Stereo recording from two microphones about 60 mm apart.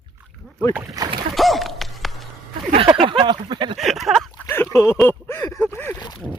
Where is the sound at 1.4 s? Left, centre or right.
Centre.